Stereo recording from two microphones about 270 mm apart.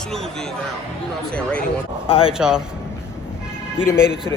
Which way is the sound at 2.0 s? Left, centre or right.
Left.